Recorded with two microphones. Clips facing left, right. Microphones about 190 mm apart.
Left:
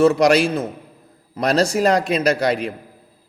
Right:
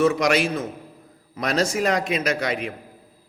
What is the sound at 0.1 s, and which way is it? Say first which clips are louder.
A man's voice: left 5 dB; 35° left (ahead or behind).